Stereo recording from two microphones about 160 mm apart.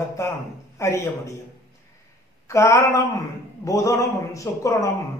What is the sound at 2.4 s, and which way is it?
A man's voice, 20° left (ahead or behind).